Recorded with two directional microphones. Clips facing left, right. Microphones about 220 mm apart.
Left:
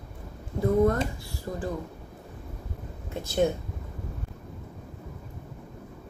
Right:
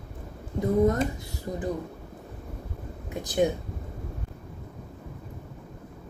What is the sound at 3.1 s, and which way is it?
Speech, 15° right (ahead or behind).